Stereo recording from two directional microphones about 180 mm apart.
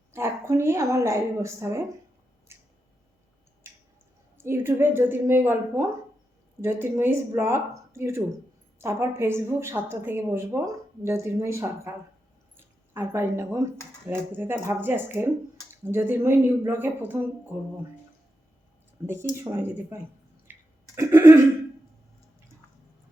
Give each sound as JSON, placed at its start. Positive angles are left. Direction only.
{"t": 0.1, "sound": "a woman's voice", "side_deg": -15}
{"t": 2.5, "sound": "a sound", "side_deg": -15}
{"t": 3.6, "sound": "squish", "side_deg": -15}
{"t": 4.4, "sound": "speech", "side_deg": -10}
{"t": 19.0, "sound": "speech", "side_deg": -15}